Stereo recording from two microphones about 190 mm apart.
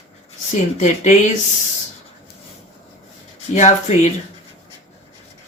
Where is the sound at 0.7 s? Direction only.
40° left (ahead or behind).